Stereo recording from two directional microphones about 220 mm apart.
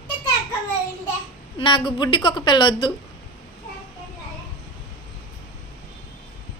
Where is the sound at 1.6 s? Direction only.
20° left (ahead or behind).